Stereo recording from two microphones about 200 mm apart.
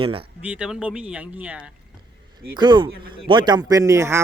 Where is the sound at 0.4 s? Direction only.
5° right (ahead or behind).